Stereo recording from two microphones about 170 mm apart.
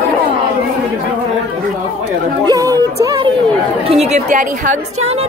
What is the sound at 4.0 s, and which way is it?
Speech, 40° right (ahead or behind).